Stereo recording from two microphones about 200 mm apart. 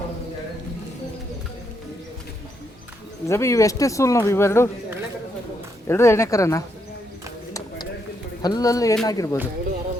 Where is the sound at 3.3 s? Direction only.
15° left (ahead or behind).